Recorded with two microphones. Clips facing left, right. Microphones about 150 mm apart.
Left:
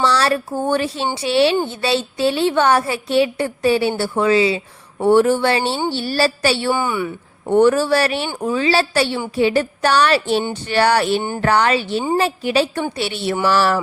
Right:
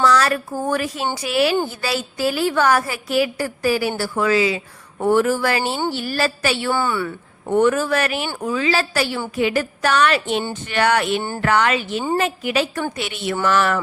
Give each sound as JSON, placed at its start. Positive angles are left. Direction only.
{"t": 0.0, "sound": "a woman's voice", "side_deg": 30}
{"t": 6.7, "sound": "speech", "side_deg": 15}
{"t": 7.5, "sound": "a woman's voice", "side_deg": 30}